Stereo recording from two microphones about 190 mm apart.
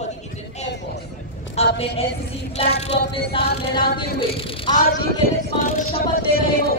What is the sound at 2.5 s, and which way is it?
Child singing, 35° left (ahead or behind).